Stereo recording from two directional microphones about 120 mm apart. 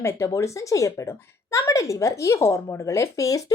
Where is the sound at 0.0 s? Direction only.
20° left (ahead or behind).